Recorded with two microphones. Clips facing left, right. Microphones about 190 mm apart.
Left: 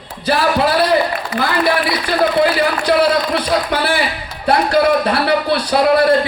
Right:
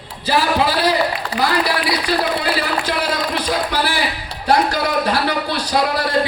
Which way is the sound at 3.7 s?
60° left (ahead or behind).